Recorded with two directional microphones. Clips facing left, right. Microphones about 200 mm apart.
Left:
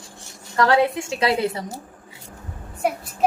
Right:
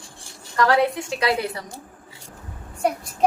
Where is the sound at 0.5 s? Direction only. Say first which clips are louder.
Left 1 dB; 25° left (ahead or behind).